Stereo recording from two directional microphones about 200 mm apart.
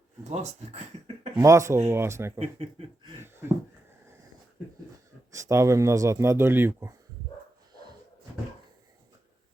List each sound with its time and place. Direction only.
0.3 s speech: 30° right (ahead or behind)
1.4 s speech: 15° right (ahead or behind)
2.4 s speech: 30° right (ahead or behind)
5.3 s speech: 15° right (ahead or behind)